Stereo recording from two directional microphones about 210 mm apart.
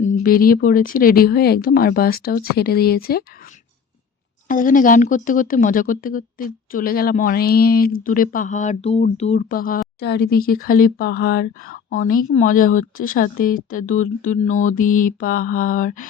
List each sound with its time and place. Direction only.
0.0 s speech: 35° left (ahead or behind)
4.4 s speech: 40° left (ahead or behind)